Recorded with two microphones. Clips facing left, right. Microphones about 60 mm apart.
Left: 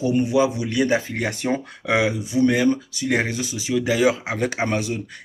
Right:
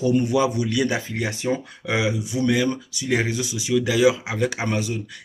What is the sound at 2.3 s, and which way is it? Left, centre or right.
Speech, left.